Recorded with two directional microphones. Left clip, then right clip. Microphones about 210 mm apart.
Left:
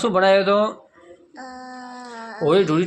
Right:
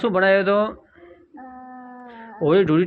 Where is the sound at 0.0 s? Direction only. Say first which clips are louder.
Left 1 dB; 10° left (ahead or behind).